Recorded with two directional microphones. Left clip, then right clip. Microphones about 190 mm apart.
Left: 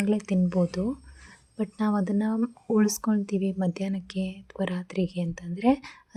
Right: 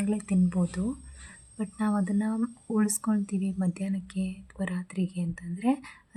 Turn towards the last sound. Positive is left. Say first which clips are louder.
# left 5 dB
turn(degrees=25)  # may be behind; listen again after turning